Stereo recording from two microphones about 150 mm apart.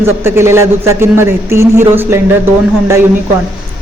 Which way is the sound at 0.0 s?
15° right (ahead or behind).